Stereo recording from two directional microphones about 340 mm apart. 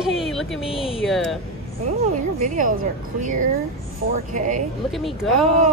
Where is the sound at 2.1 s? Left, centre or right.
Right.